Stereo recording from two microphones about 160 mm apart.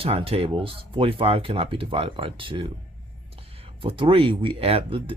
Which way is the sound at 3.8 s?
35° right (ahead or behind).